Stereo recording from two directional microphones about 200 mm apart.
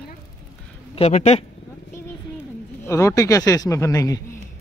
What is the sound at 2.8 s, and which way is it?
Speech, 15° left (ahead or behind).